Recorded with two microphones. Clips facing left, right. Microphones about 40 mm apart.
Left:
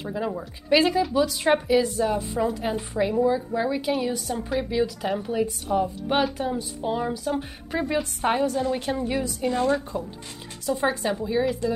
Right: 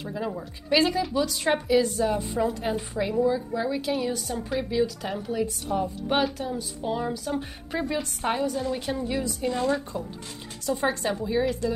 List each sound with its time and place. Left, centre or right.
0.0 s a woman's voice: centre
6.3 s a woman's voice: centre